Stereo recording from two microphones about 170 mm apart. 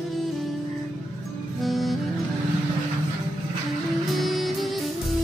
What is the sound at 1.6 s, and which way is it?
Music, centre (ahead or behind).